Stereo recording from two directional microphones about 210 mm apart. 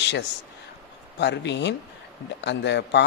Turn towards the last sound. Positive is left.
turn(degrees=55)  # may be behind; listen again after turning